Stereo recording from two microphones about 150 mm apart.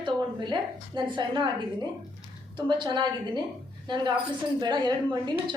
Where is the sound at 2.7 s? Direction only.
30° right (ahead or behind).